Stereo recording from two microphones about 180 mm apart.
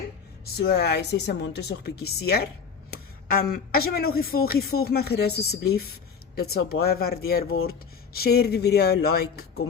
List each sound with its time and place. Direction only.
0.6 s speech: 70° left (ahead or behind)